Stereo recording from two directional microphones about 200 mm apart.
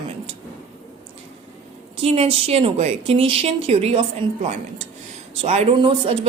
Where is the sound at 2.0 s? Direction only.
30° right (ahead or behind).